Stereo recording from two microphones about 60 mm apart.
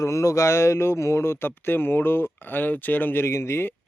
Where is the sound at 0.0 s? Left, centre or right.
Left.